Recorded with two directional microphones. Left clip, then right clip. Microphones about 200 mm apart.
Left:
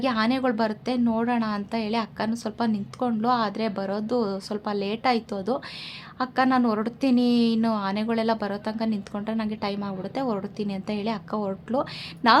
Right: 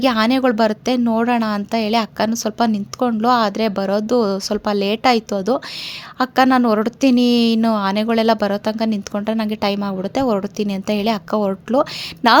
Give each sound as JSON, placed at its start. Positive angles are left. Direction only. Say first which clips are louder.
{"t": 0.0, "sound": "a woman's voice", "louder": "right 8 dB", "side_deg": -35}